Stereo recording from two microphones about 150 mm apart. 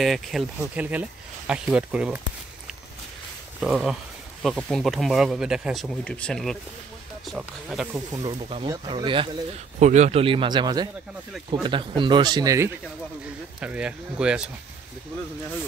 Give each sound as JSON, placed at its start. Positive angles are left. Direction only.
{"t": 0.0, "sound": "speech", "side_deg": 0}
{"t": 3.6, "sound": "speech", "side_deg": -5}
{"t": 7.9, "sound": "speech", "side_deg": -25}
{"t": 8.3, "sound": "speech", "side_deg": -40}
{"t": 9.8, "sound": "speech", "side_deg": -50}
{"t": 13.6, "sound": "speech", "side_deg": -5}